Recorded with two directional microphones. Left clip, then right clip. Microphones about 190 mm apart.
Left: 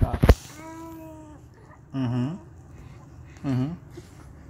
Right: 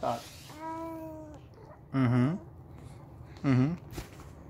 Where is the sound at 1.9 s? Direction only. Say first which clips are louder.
Right 1 dB; 35° right (ahead or behind).